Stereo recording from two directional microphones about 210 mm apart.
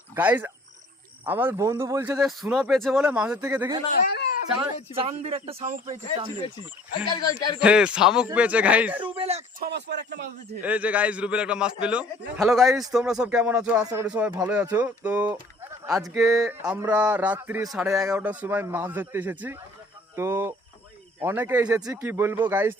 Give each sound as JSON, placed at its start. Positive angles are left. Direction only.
{"t": 0.1, "sound": "a man's voice", "side_deg": -10}
{"t": 3.9, "sound": "a child's voice", "side_deg": 45}
{"t": 4.9, "sound": "a man's voice", "side_deg": -30}
{"t": 7.1, "sound": "speech", "side_deg": 20}
{"t": 7.6, "sound": "a man's voice", "side_deg": -5}
{"t": 9.1, "sound": "a man's voice", "side_deg": -30}
{"t": 9.6, "sound": "a man's voice", "side_deg": -55}
{"t": 10.6, "sound": "a man's voice", "side_deg": -5}
{"t": 16.1, "sound": "a man's voice", "side_deg": 0}